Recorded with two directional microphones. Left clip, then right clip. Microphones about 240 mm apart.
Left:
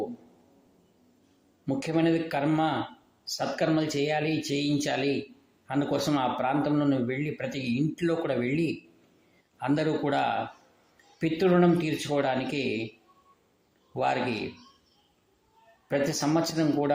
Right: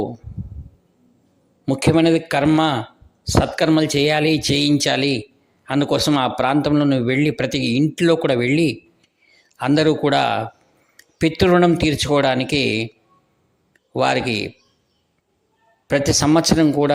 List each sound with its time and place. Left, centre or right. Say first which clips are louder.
1.6 s a man's voice: right 10 dB; right
13.9 s speech: right 9 dB; right
15.9 s a man's voice: right 10 dB; right